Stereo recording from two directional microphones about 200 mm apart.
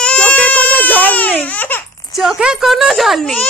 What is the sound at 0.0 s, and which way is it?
Baby cry, 5° left (ahead or behind).